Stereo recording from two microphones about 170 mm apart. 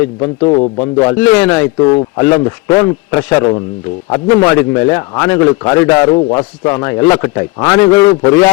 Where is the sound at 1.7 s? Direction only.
30° left (ahead or behind).